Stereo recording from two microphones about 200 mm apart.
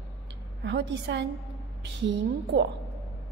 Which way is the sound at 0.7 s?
60° right (ahead or behind).